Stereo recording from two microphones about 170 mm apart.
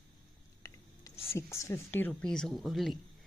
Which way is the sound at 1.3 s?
15° left (ahead or behind).